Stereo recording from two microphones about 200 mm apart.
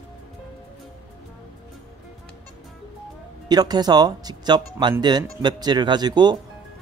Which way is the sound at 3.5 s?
20° right (ahead or behind).